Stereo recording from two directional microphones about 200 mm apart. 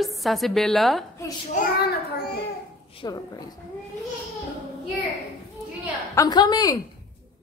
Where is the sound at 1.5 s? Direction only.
50° left (ahead or behind).